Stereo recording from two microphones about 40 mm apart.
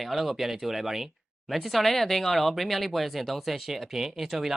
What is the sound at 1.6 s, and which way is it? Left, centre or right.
Speech, centre.